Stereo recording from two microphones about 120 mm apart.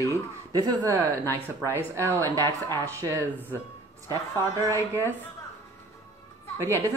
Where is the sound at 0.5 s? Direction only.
30° right (ahead or behind).